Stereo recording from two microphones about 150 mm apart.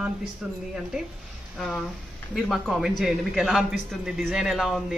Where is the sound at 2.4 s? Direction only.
Centre (ahead or behind).